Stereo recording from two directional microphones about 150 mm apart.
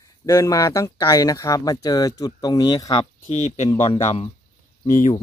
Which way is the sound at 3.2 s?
50° left (ahead or behind).